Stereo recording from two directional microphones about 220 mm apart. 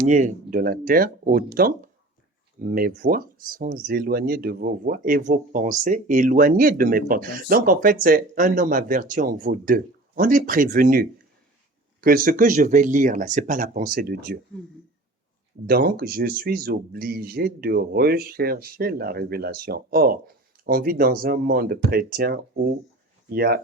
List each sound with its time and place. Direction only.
0.0 s speech: 35° right (ahead or behind)
15.6 s speech: 45° right (ahead or behind)